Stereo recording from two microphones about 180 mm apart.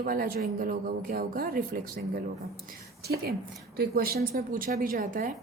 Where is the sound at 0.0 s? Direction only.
55° right (ahead or behind).